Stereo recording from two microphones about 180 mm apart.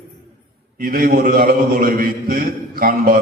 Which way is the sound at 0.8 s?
55° right (ahead or behind).